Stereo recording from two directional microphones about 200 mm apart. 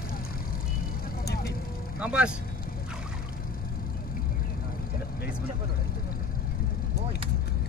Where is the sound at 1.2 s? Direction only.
50° left (ahead or behind).